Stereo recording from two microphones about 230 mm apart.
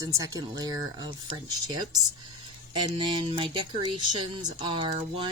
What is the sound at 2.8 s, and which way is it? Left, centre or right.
Speech, right.